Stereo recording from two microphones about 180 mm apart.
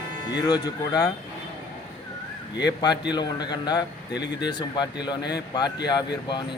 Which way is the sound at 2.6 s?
20° left (ahead or behind).